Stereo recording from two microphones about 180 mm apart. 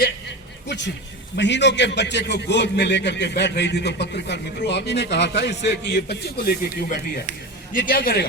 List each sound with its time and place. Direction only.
1.4 s a man's voice: 75° left (ahead or behind); by 8.3 s 60° left (ahead or behind)